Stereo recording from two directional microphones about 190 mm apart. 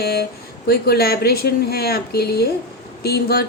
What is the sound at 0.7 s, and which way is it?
Speech, 55° left (ahead or behind).